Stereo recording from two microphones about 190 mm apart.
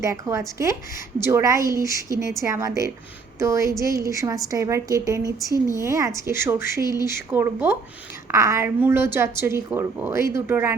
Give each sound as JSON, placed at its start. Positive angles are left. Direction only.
{"t": 0.0, "sound": "a woman's voice", "side_deg": -15}